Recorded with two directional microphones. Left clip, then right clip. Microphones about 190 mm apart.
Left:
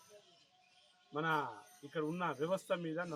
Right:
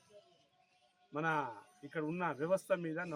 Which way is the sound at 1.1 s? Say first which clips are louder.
Even; 25° right (ahead or behind).